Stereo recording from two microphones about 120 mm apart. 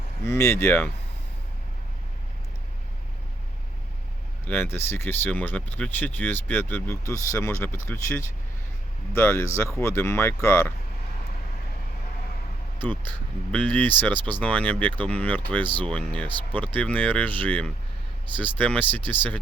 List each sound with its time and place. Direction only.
0.3 s speech: 20° left (ahead or behind)
4.4 s speech: 20° left (ahead or behind)
13.1 s speech: 10° left (ahead or behind)